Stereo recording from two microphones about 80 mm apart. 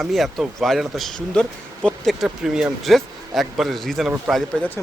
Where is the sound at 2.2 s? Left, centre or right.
Centre.